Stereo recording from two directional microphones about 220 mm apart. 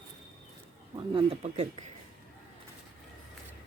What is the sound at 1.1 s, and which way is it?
Speech, 25° right (ahead or behind).